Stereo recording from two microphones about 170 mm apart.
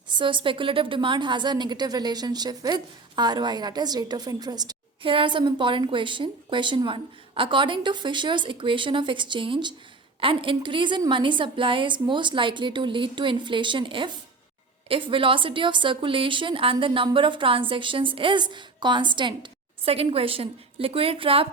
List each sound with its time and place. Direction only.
0.1 s a woman's voice: 30° right (ahead or behind)